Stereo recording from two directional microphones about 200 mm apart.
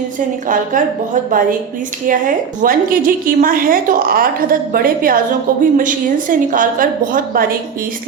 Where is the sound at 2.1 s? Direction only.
40° right (ahead or behind).